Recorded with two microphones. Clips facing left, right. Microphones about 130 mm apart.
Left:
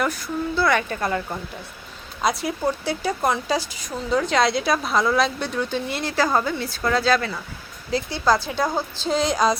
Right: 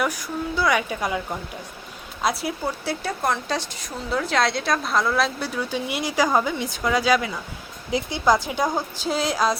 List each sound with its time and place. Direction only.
0.0 s a woman's voice: 10° right (ahead or behind)